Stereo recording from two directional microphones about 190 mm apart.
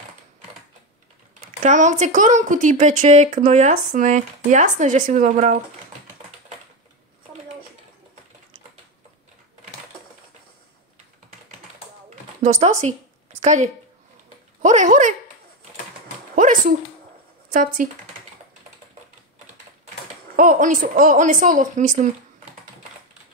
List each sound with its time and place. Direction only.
1.6 s a woman's voice: 40° right (ahead or behind)
12.4 s a woman's voice: 40° right (ahead or behind)
16.3 s a sound: 45° right (ahead or behind)
17.5 s speech: 45° right (ahead or behind)
20.3 s a woman's voice: 45° right (ahead or behind)